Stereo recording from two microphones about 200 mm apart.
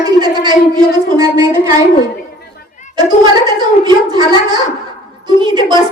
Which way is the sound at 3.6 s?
20° right (ahead or behind).